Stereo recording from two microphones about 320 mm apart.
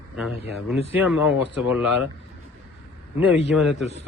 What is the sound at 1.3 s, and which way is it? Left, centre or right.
Speech, left.